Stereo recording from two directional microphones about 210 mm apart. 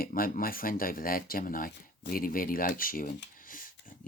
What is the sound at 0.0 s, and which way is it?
Speech, 45° left (ahead or behind).